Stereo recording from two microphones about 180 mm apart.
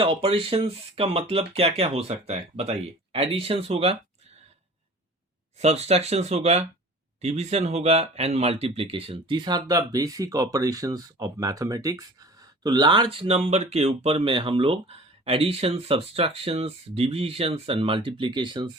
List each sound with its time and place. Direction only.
0.0 s speech: 30° right (ahead or behind)
5.5 s speech: 35° right (ahead or behind)